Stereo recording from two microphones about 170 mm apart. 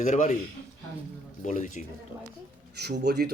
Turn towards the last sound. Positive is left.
turn(degrees=-70)  # may be behind; listen again after turning